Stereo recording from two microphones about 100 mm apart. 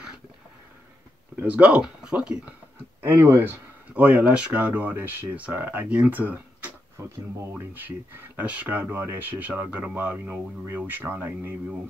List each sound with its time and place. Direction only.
1.3 s speech: 15° right (ahead or behind)
3.0 s speech: 25° right (ahead or behind)